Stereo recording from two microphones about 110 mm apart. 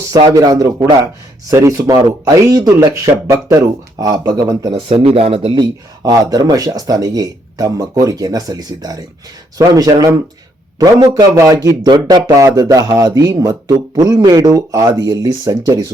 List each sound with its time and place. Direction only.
0.3 s speech: 35° right (ahead or behind)
4.7 s speech: 60° right (ahead or behind)
6.1 s speech: 35° right (ahead or behind)
11.0 s speech: 35° right (ahead or behind)